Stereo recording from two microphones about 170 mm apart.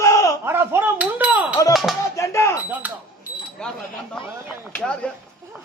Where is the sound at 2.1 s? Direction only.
15° left (ahead or behind).